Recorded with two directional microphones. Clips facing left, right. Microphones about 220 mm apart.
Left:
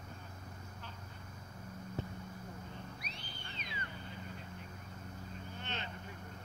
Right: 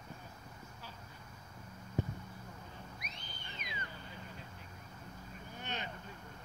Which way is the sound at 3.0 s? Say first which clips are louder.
Left 2 dB; 30° left (ahead or behind).